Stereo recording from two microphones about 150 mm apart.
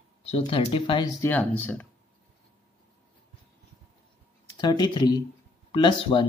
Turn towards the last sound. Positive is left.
turn(degrees=35)  # may be behind; listen again after turning